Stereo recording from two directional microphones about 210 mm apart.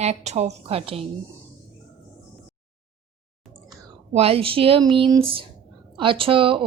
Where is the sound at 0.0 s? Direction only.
30° right (ahead or behind).